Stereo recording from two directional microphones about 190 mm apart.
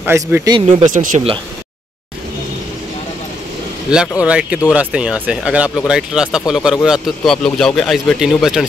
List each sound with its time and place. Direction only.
0.0 s speech: 10° right (ahead or behind)
0.8 s speech: 40° right (ahead or behind)
4.2 s speech: 5° right (ahead or behind)